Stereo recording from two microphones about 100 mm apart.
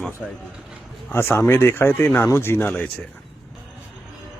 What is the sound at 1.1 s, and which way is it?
Speech, 20° left (ahead or behind).